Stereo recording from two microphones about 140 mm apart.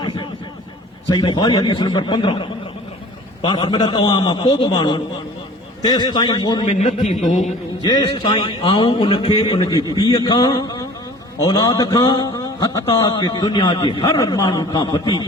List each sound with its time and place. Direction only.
1.0 s a man's voice: 35° left (ahead or behind)
6.7 s a man's voice: 50° left (ahead or behind)
7.8 s a man's voice: 30° left (ahead or behind)